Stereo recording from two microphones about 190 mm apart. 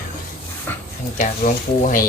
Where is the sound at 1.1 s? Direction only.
55° left (ahead or behind).